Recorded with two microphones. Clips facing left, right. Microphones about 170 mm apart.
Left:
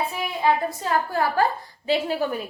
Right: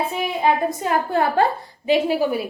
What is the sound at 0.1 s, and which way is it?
A woman's voice, 20° right (ahead or behind).